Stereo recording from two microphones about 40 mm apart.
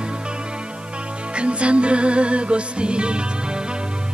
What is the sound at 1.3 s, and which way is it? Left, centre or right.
Music, right.